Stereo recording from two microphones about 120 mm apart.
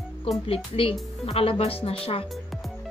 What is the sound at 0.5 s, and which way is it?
A woman's voice, 50° left (ahead or behind).